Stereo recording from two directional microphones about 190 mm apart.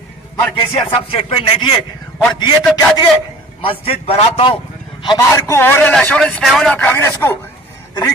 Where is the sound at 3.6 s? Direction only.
30° left (ahead or behind).